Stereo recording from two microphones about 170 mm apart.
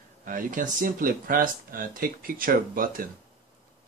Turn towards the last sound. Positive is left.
turn(degrees=-55)  # may be behind; listen again after turning